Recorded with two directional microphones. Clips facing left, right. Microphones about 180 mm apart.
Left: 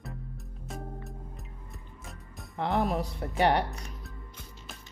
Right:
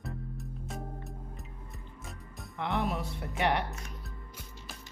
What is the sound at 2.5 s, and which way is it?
Speech, 40° left (ahead or behind).